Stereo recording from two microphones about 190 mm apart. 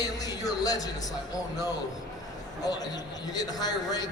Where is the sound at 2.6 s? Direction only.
20° left (ahead or behind).